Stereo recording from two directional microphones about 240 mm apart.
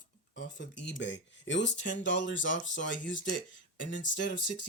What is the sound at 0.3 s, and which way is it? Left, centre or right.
Speech, left.